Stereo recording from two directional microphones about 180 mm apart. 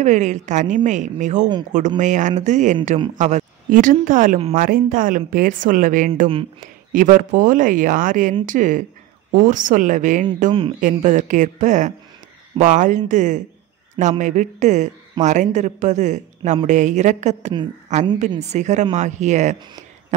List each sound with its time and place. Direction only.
0.0 s speech: 40° right (ahead or behind)